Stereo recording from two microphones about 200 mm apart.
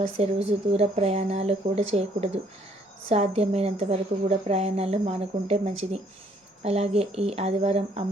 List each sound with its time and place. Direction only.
0.2 s a woman's voice: 30° right (ahead or behind)